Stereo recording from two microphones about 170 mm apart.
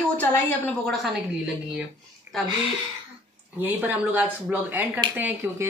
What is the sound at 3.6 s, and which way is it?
A woman's voice, 10° right (ahead or behind).